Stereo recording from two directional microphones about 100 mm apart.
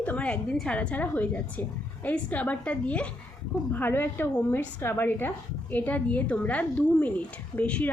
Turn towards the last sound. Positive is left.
turn(degrees=15)  # may be behind; listen again after turning